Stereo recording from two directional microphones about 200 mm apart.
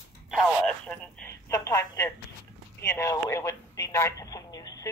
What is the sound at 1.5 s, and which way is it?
Speech, 15° left (ahead or behind).